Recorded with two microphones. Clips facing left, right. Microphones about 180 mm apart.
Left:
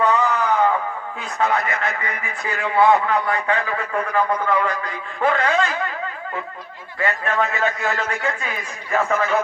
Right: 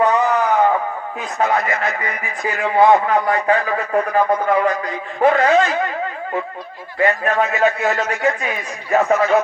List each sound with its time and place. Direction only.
0.0 s a sound: 40° right (ahead or behind)
1.4 s a man's voice: 35° right (ahead or behind)
7.0 s a man's voice: 40° right (ahead or behind)